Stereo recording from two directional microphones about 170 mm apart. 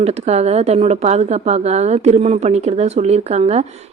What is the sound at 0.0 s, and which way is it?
Speech, 40° right (ahead or behind).